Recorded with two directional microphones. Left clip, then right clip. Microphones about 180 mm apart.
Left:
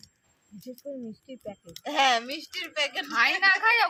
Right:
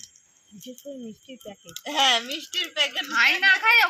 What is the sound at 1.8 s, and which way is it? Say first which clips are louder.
Speech: right 2 dB; 15° left (ahead or behind).